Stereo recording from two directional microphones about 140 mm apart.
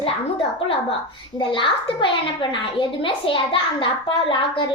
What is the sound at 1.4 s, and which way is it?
A woman's voice, 35° left (ahead or behind).